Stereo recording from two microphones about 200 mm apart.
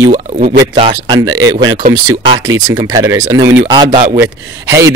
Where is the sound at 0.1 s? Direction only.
35° right (ahead or behind).